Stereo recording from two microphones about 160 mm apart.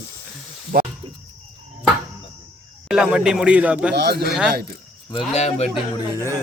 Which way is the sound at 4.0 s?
90° right.